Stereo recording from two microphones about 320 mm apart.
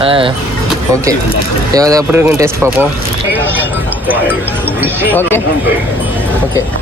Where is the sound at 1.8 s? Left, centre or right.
Centre.